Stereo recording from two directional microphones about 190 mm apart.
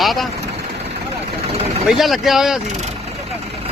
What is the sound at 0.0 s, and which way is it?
Vehicle, centre (ahead or behind).